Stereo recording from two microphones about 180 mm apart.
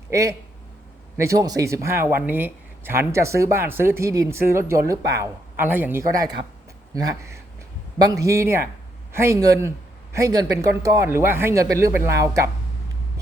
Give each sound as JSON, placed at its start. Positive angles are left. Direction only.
{"t": 0.1, "sound": "speech", "side_deg": -15}